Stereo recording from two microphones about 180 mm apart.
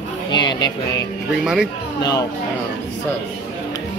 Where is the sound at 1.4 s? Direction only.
5° right (ahead or behind).